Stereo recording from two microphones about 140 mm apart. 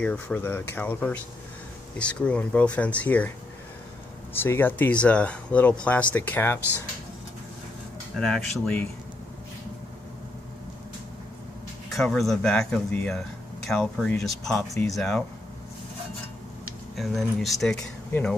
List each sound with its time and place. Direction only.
0.0 s speech: 10° left (ahead or behind)
4.3 s speech: 15° left (ahead or behind)
8.2 s speech: 5° left (ahead or behind)
11.9 s speech: centre (ahead or behind)
16.9 s speech: centre (ahead or behind)